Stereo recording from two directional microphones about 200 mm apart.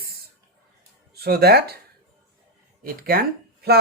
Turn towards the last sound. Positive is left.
turn(degrees=-50)  # may be behind; listen again after turning